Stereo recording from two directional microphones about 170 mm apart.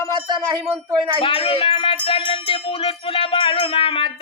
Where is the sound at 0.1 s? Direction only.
30° right (ahead or behind).